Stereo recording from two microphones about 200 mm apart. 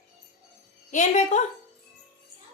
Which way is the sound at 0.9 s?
35° left (ahead or behind).